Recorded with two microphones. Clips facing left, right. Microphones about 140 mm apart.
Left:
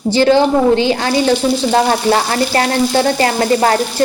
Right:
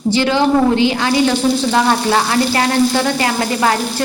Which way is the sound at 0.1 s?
35° left (ahead or behind).